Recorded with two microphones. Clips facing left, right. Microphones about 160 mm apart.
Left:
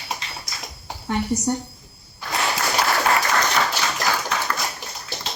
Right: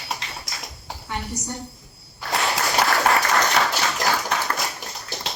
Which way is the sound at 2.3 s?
Centre (ahead or behind).